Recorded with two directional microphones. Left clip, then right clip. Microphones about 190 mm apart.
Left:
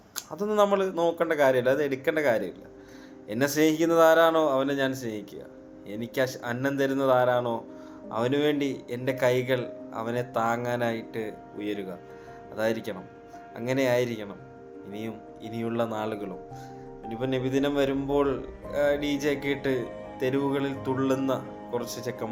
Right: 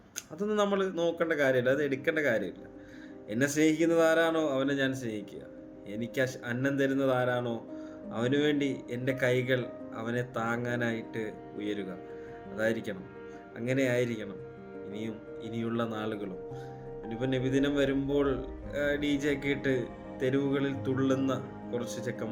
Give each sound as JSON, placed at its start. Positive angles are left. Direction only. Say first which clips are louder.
{"t": 0.2, "sound": "speech", "louder": "left 6 dB", "side_deg": -20}